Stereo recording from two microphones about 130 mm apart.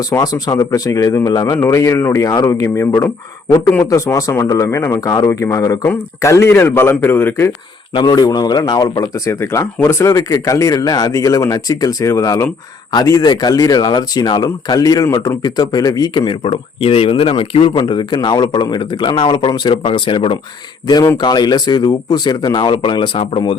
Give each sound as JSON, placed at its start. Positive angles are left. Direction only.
{"t": 0.1, "sound": "a man's voice", "side_deg": 30}
{"t": 7.9, "sound": "speech", "side_deg": 30}
{"t": 20.8, "sound": "speech", "side_deg": 25}